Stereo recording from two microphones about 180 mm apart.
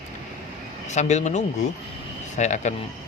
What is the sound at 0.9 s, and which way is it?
Speech, 40° left (ahead or behind).